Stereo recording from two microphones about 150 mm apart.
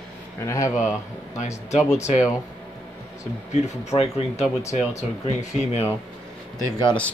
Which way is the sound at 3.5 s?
45° left (ahead or behind).